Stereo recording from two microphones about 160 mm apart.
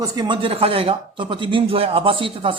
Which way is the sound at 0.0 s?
25° right (ahead or behind).